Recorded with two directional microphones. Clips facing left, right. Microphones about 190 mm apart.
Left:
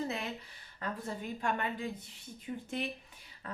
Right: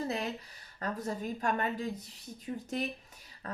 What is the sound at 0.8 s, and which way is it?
A woman's voice, 40° right (ahead or behind).